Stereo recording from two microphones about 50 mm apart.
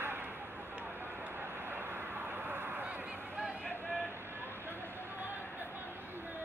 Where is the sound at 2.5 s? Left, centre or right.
Right.